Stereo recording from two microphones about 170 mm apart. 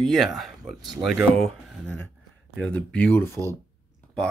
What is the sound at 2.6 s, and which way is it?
Speech, 5° left (ahead or behind).